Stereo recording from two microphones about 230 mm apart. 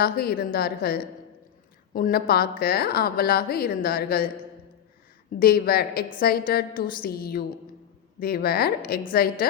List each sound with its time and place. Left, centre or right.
0.0 s a woman's voice: left
5.3 s a woman's voice: left